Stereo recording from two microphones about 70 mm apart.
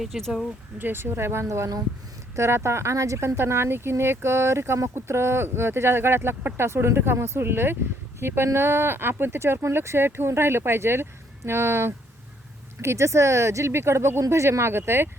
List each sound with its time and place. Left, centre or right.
0.0 s speech: centre
0.8 s speech: right